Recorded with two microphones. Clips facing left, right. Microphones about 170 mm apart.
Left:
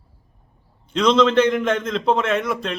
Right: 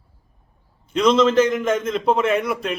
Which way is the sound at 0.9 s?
5° right (ahead or behind).